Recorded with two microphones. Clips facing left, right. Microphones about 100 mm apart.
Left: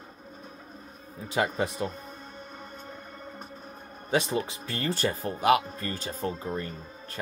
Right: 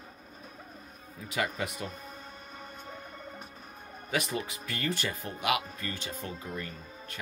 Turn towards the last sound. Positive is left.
turn(degrees=35)  # may be behind; listen again after turning